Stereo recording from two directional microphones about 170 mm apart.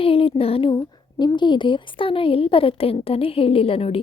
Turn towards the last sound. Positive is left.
turn(degrees=35)  # may be behind; listen again after turning